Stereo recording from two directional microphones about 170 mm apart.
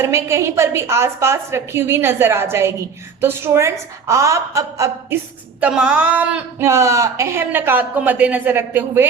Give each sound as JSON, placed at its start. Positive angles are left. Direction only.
{"t": 0.0, "sound": "a woman's voice", "side_deg": -15}